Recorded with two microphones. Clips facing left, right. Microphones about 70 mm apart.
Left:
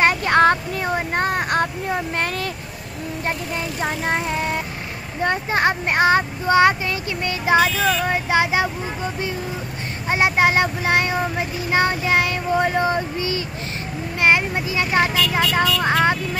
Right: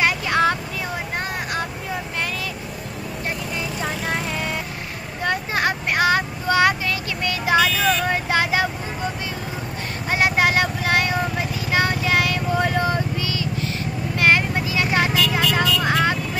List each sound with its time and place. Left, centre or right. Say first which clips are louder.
0.0 s vehicle: left 4 dB; left
4.1 s vehicle: left 3 dB; left
10.0 s vehicle: left 2 dB; left
15.3 s speech: left 1 dB; left